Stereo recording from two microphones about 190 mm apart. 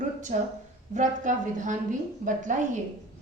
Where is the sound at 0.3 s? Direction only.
40° right (ahead or behind).